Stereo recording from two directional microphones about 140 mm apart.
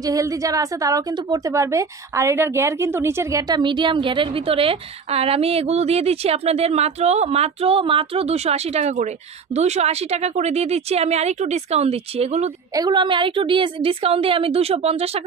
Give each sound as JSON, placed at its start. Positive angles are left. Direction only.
{"t": 0.0, "sound": "a woman's voice", "side_deg": -25}
{"t": 12.7, "sound": "a woman's voice", "side_deg": -30}